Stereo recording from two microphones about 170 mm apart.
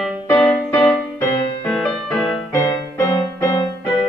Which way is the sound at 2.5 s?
15° left (ahead or behind).